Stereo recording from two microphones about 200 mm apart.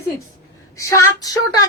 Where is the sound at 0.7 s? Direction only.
15° left (ahead or behind).